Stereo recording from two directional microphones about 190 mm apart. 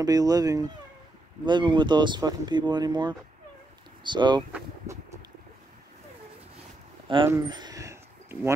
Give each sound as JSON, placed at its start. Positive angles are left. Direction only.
{"t": 0.0, "sound": "speech", "side_deg": -20}
{"t": 4.5, "sound": "speech", "side_deg": -10}
{"t": 7.2, "sound": "a sound", "side_deg": -20}